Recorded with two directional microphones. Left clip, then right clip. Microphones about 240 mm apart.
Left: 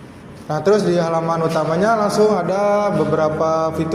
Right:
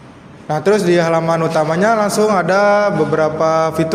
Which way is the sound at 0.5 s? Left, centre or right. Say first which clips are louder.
Right 3 dB; right.